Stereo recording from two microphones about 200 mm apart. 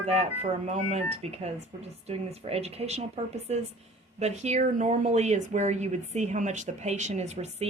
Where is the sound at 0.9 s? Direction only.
35° right (ahead or behind).